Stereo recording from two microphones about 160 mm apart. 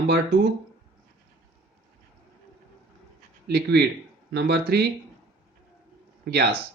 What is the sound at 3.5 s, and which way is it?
Speech, 90° right.